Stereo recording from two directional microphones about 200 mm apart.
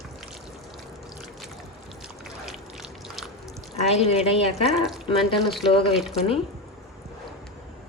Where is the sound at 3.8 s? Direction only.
30° left (ahead or behind).